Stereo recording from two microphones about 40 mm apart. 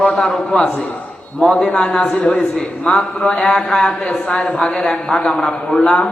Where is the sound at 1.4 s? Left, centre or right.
Centre.